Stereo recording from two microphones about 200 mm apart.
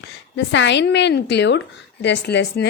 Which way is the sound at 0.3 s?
65° left (ahead or behind).